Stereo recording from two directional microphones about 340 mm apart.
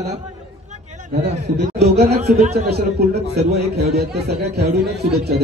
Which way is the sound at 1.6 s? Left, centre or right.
Right.